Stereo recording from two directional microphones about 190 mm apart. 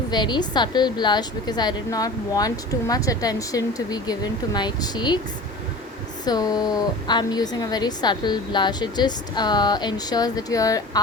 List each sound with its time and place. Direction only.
0.1 s a woman's voice: 20° left (ahead or behind)
6.2 s a woman's voice: 20° left (ahead or behind)